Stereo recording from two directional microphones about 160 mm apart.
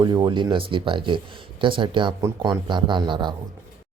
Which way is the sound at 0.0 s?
30° right (ahead or behind).